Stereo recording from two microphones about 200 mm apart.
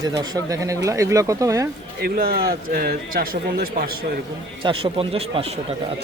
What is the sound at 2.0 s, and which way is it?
A man's voice, 50° right (ahead or behind).